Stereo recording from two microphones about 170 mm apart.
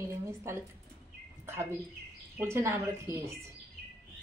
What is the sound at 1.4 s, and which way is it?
A woman's voice, 15° right (ahead or behind).